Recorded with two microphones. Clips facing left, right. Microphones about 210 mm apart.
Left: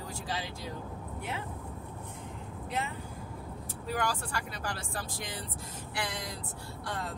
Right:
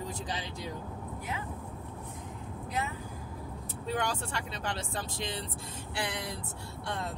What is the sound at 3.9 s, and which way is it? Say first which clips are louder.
Speech: even; 25° right (ahead or behind).